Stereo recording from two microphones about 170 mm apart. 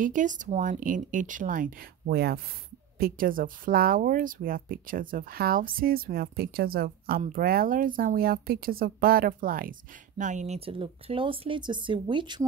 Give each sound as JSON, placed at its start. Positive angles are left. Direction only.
{"t": 0.0, "sound": "speech", "side_deg": -50}